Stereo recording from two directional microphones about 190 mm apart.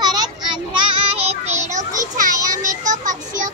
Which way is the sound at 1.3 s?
35° right (ahead or behind).